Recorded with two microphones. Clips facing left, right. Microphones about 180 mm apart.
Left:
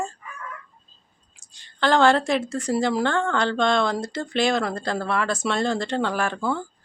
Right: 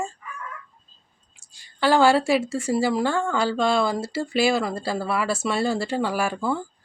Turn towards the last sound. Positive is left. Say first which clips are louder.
# even
turn(degrees=-10)  # may be behind; listen again after turning